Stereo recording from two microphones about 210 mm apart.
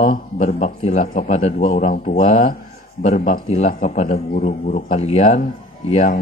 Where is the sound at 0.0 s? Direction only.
35° left (ahead or behind).